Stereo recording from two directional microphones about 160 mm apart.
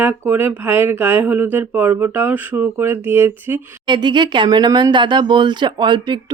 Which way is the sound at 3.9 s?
30° right (ahead or behind).